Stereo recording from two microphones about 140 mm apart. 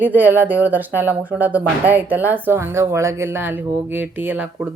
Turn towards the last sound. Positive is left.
turn(degrees=-10)  # may be behind; listen again after turning